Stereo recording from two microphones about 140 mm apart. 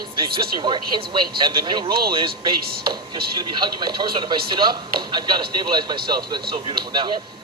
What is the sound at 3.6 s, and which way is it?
Speech, 30° right (ahead or behind).